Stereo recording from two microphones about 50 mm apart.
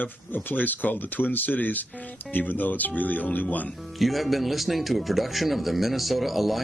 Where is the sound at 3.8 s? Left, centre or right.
Centre.